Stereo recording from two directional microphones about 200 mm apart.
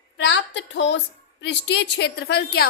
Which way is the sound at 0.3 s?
60° left (ahead or behind).